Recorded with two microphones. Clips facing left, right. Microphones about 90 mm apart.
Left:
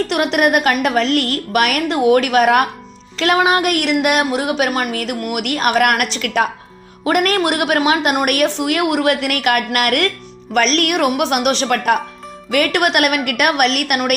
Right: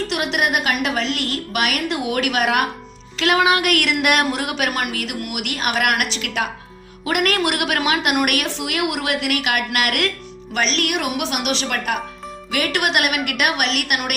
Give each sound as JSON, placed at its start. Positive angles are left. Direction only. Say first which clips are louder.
{"t": 0.1, "sound": "a woman's voice", "louder": "left 6 dB", "side_deg": 45}